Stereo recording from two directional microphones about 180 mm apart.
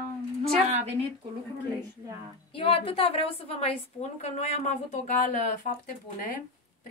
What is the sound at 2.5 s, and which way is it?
A woman's voice, 30° left (ahead or behind).